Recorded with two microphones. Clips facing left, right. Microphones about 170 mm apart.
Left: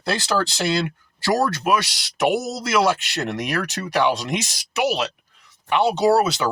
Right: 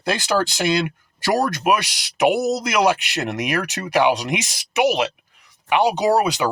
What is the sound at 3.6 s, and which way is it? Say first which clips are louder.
Speech: right 3 dB; 15° right (ahead or behind).